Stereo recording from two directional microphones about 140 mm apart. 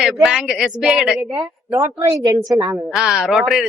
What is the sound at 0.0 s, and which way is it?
Speech, 5° right (ahead or behind).